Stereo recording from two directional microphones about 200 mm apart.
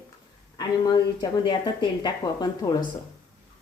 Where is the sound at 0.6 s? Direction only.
20° left (ahead or behind).